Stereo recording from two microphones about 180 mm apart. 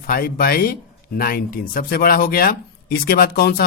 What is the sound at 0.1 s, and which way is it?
Speech, 55° left (ahead or behind).